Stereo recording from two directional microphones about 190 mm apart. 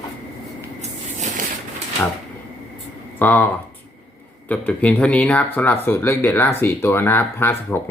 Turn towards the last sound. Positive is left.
turn(degrees=10)  # may be behind; listen again after turning